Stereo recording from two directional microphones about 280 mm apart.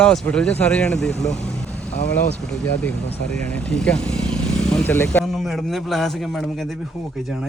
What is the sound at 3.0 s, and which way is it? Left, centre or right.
Speech, left.